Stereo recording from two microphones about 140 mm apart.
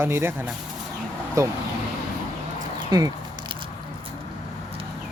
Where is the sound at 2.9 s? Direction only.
30° right (ahead or behind).